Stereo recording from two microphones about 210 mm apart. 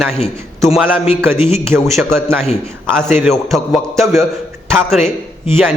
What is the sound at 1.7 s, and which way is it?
Speech, 10° right (ahead or behind).